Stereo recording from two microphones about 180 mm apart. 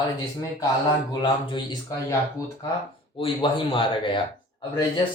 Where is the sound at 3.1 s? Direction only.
30° left (ahead or behind).